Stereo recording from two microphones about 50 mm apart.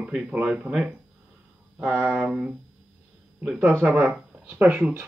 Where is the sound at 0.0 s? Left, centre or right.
Right.